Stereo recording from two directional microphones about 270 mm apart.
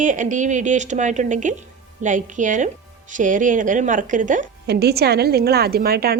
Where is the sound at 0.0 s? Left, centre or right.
Right.